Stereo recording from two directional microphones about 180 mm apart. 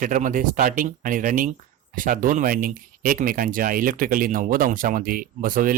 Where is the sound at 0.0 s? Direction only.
45° right (ahead or behind).